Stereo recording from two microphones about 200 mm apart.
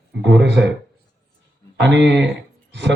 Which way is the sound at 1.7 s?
60° right (ahead or behind).